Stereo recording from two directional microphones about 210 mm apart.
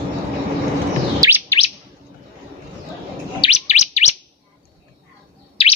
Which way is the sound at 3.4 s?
30° left (ahead or behind).